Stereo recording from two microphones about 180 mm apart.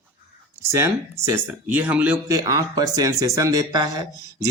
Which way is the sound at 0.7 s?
15° right (ahead or behind).